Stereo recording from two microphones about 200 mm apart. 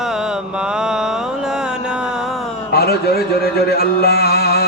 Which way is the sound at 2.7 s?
50° left (ahead or behind).